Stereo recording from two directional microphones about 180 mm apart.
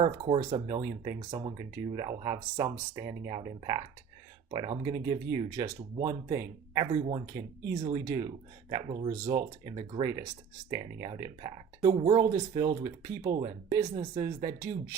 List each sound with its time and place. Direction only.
0.0 s speech: 30° right (ahead or behind)
7.8 s speech: 35° right (ahead or behind)
8.0 s speech: 20° right (ahead or behind)
9.6 s speech: 30° right (ahead or behind)